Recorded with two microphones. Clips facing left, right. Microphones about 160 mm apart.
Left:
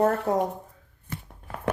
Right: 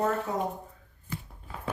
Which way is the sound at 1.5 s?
85° left.